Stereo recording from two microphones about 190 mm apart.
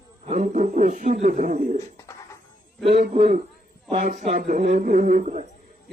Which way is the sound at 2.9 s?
50° right (ahead or behind).